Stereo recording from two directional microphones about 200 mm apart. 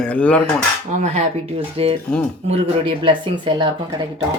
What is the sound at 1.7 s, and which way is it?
Speech, 30° right (ahead or behind).